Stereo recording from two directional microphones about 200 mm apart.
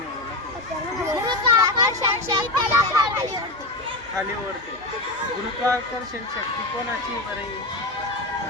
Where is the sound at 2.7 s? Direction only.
15° right (ahead or behind).